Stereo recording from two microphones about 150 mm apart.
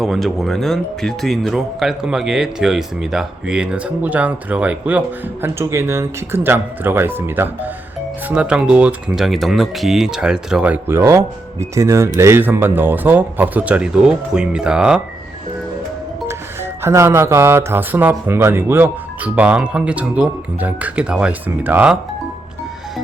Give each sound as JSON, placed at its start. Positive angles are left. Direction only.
{"t": 0.0, "sound": "speech", "side_deg": 0}
{"t": 16.2, "sound": "speech", "side_deg": -15}